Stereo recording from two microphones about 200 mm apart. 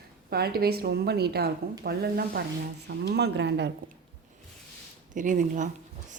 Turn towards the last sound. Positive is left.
turn(degrees=-40)  # may be behind; listen again after turning